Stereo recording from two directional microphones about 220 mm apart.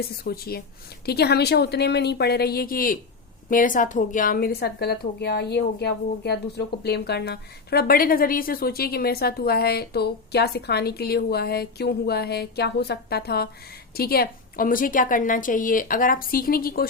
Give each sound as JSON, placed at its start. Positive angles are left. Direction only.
{"t": 0.0, "sound": "a woman's voice", "side_deg": 45}